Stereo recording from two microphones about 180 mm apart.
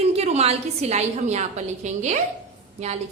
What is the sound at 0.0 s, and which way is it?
A woman's voice, 35° right (ahead or behind).